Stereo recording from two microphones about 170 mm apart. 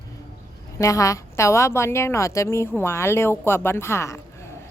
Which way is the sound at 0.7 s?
20° left (ahead or behind).